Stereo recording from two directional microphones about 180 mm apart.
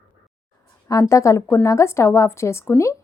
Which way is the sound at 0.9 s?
15° left (ahead or behind).